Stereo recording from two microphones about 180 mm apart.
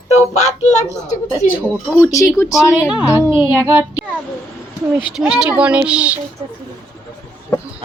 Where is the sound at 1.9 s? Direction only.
15° left (ahead or behind).